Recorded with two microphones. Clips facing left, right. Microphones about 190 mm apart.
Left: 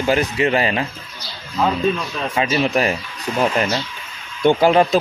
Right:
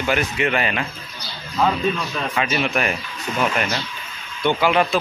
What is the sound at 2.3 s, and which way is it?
Speech, 30° left (ahead or behind).